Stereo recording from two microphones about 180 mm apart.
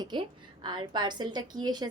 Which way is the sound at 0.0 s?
25° right (ahead or behind).